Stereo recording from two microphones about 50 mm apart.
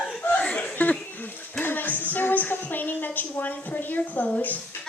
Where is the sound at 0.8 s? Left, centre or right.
Left.